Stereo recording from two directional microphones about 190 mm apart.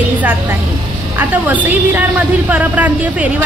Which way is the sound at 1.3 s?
10° right (ahead or behind).